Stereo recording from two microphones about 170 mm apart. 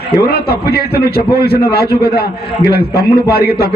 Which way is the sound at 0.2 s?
65° left (ahead or behind).